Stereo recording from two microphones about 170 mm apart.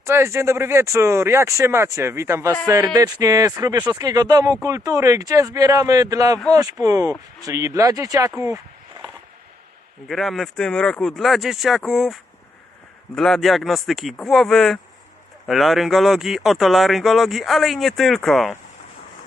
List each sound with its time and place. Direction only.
0.0 s speech: 15° right (ahead or behind)
10.1 s speech: centre (ahead or behind)